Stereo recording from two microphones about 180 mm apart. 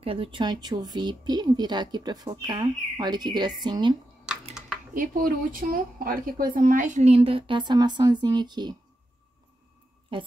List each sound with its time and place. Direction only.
0.0 s speech: 30° right (ahead or behind)
4.3 s a sound: 5° right (ahead or behind)
4.9 s a woman's voice: 50° right (ahead or behind); by 8.7 s 25° right (ahead or behind)